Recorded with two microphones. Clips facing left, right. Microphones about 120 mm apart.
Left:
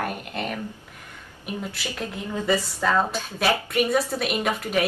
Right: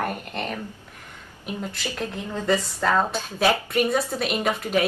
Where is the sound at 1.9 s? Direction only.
10° left (ahead or behind).